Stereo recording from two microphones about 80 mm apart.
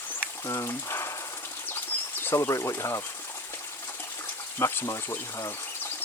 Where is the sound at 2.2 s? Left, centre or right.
Left.